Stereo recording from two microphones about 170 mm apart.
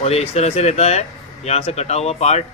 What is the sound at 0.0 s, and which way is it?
Speech, 40° left (ahead or behind).